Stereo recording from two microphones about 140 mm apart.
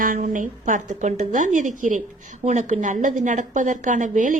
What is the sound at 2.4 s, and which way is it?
A woman's voice, 60° right (ahead or behind).